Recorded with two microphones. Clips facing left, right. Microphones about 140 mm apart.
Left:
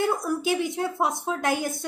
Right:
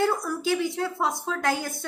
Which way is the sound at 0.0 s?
20° left (ahead or behind).